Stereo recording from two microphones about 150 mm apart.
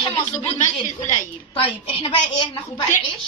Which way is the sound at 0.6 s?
55° left (ahead or behind).